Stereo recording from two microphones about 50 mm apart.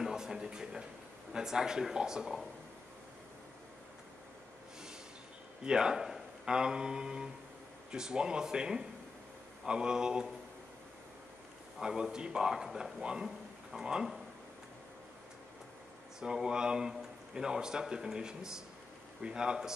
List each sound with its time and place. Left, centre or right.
0.0 s speech: centre
5.6 s speech: centre
11.8 s speech: centre
13.0 s speech: centre
16.2 s speech: centre